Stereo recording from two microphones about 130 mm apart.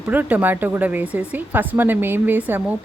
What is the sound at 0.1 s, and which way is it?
Speech, 15° right (ahead or behind).